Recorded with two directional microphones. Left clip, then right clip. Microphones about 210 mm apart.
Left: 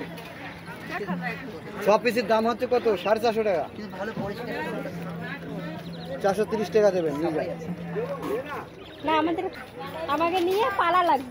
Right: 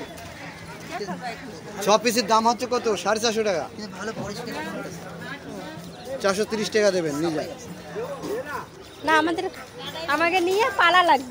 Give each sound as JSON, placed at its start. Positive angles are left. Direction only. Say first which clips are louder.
{"t": 1.9, "sound": "speech", "louder": "right 2 dB", "side_deg": -50}
{"t": 6.1, "sound": "speech", "louder": "right 1 dB", "side_deg": -45}
{"t": 9.0, "sound": "a woman's voice", "louder": "right 3 dB", "side_deg": -10}